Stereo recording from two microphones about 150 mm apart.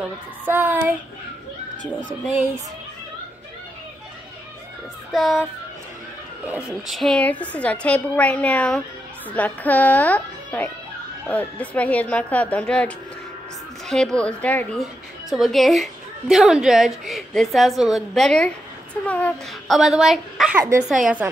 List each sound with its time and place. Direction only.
0.0 s speech: 15° right (ahead or behind)
1.8 s speech: 60° right (ahead or behind)
5.1 s a woman's voice: centre (ahead or behind)
6.9 s a woman's voice: centre (ahead or behind)
14.8 s a woman's voice: centre (ahead or behind)
19.7 s a woman's voice: 5° right (ahead or behind)